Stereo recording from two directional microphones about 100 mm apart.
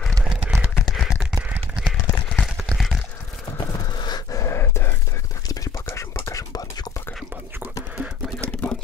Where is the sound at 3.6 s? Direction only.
45° left (ahead or behind).